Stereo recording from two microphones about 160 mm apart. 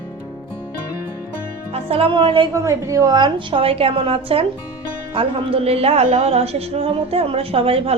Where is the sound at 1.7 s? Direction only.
35° right (ahead or behind).